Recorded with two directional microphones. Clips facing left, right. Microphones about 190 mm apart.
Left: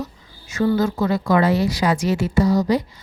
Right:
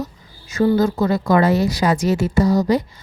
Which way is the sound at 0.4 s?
35° right (ahead or behind).